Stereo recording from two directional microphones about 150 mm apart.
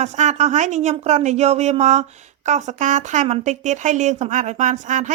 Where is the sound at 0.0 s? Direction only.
50° right (ahead or behind).